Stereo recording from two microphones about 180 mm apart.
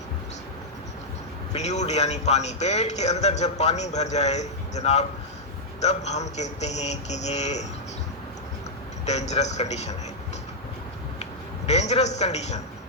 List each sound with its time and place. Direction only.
1.5 s speech: 40° left (ahead or behind)
9.0 s speech: 40° left (ahead or behind)
11.2 s a man's voice: 35° left (ahead or behind)